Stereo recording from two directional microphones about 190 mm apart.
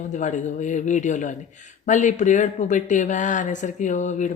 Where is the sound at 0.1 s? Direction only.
40° left (ahead or behind).